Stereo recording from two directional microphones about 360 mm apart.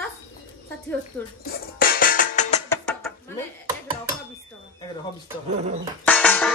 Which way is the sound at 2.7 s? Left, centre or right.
Centre.